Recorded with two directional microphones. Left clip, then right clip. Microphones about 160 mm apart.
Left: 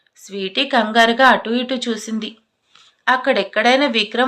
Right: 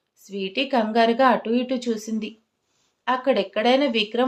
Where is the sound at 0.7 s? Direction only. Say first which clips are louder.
Left 6 dB; 15° right (ahead or behind).